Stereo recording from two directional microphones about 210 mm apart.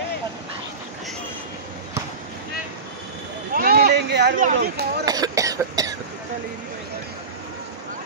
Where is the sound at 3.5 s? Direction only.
45° right (ahead or behind).